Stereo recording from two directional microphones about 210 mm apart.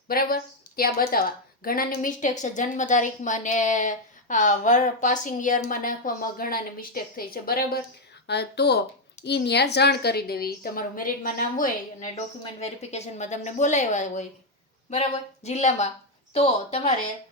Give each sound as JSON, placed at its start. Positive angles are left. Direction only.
{"t": 0.1, "sound": "a woman's voice", "side_deg": 45}